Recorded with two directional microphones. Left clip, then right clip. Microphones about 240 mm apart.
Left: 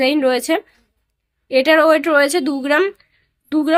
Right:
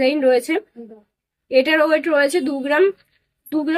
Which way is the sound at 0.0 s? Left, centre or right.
Left.